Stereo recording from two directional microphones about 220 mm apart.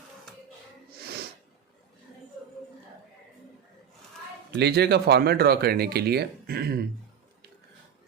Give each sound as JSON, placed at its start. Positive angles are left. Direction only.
{"t": 4.5, "sound": "speech", "side_deg": -50}